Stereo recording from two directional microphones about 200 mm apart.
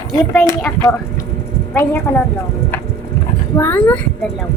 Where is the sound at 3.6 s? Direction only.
10° left (ahead or behind).